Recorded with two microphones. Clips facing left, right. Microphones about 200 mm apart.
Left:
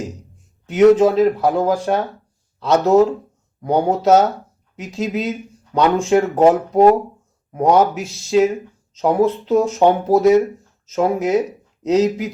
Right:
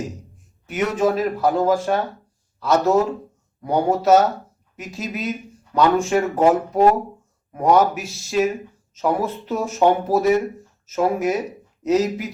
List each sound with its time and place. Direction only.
0.7 s speech: 20° left (ahead or behind)
7.5 s speech: 20° left (ahead or behind)